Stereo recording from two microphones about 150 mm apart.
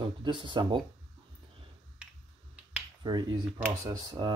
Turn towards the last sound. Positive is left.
turn(degrees=-25)  # may be behind; listen again after turning